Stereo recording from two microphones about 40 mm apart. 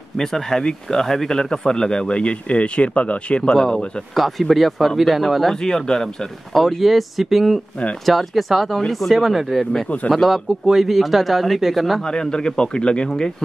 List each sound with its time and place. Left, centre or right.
0.2 s speech: centre; by 3.5 s left
3.5 s speech: centre
5.6 s speech: centre
6.5 s speech: centre
9.7 s speech: centre
10.1 s speech: centre
12.1 s speech: centre